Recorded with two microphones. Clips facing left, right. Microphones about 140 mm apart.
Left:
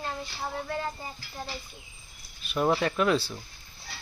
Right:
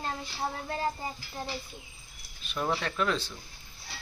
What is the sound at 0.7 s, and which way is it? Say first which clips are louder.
Stir: right 1 dB; 30° right (ahead or behind).